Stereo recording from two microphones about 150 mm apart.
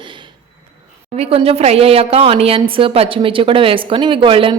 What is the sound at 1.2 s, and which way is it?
A woman's voice, 40° right (ahead or behind).